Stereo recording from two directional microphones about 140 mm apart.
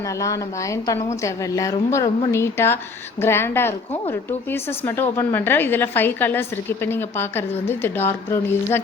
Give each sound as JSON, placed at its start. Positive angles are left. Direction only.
{"t": 0.2, "sound": "a woman's voice", "side_deg": 25}